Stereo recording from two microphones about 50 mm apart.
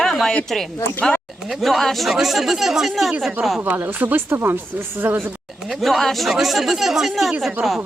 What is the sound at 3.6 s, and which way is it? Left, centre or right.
Speech, right.